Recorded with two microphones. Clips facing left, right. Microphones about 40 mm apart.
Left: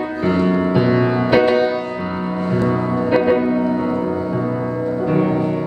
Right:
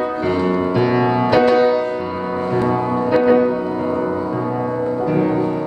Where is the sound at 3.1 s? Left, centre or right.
Centre.